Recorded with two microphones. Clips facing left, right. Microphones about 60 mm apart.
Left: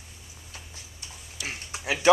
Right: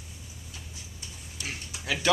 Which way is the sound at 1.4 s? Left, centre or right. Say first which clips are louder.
Left 3 dB; left.